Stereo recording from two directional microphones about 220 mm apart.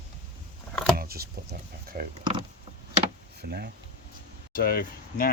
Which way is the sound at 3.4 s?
45° right (ahead or behind).